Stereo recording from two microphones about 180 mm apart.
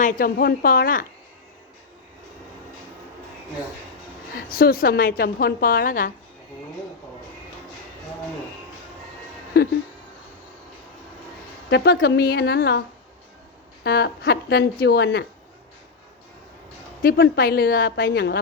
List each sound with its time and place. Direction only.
0.0 s a woman's voice: 55° left (ahead or behind)
4.4 s a woman's voice: 55° left (ahead or behind)
9.5 s a woman's voice: 60° left (ahead or behind)
11.7 s a woman's voice: 65° left (ahead or behind)
13.8 s a woman's voice: 60° left (ahead or behind)
17.0 s a woman's voice: 55° left (ahead or behind)